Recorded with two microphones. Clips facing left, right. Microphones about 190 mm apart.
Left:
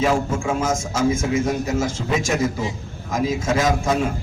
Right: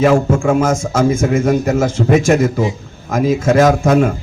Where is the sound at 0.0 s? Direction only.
60° right (ahead or behind).